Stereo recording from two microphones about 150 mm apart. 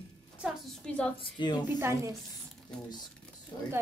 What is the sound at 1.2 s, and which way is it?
Speech, 30° left (ahead or behind).